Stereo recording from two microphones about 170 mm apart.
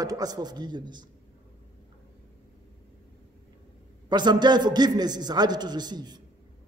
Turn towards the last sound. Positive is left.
turn(degrees=-25)  # may be behind; listen again after turning